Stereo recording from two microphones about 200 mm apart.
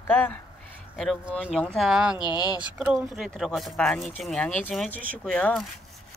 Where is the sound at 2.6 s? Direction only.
5° right (ahead or behind).